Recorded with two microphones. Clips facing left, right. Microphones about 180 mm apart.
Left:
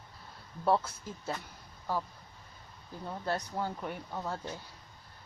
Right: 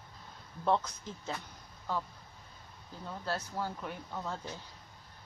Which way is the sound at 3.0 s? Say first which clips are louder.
Left 3 dB; 15° left (ahead or behind).